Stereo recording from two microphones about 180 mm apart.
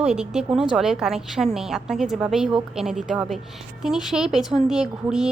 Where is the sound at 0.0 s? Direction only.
5° right (ahead or behind).